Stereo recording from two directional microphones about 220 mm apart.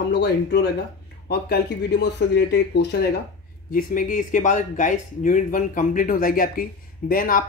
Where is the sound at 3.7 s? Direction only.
40° left (ahead or behind).